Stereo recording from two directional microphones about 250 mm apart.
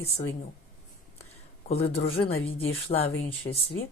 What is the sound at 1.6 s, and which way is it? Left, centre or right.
Speech, left.